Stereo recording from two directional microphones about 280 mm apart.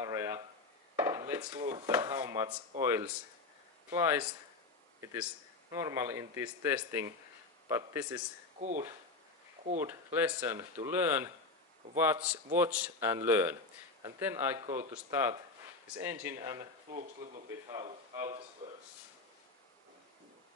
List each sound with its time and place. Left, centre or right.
0.0 s a sound: centre
0.9 s speech: centre
8.5 s speech: right
9.8 s speech: centre
17.7 s speech: centre